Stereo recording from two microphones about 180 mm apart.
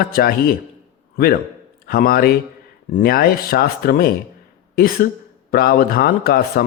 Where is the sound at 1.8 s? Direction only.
55° left (ahead or behind).